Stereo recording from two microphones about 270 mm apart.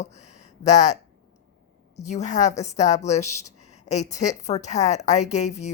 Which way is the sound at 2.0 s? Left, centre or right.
Left.